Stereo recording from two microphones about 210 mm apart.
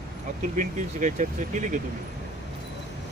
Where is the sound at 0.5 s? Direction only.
35° right (ahead or behind).